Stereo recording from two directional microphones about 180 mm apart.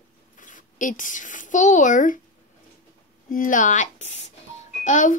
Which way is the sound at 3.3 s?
50° left (ahead or behind).